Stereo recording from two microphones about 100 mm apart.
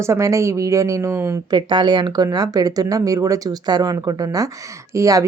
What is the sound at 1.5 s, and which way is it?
Speech, 50° right (ahead or behind).